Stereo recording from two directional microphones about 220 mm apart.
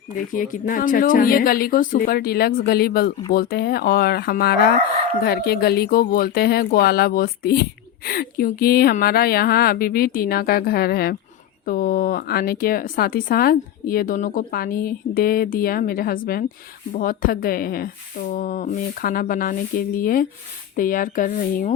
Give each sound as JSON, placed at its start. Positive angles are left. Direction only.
{"t": 0.3, "sound": "speech", "side_deg": 40}